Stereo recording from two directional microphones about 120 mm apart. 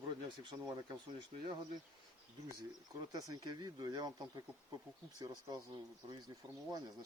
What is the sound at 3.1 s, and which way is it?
Speech, 35° right (ahead or behind).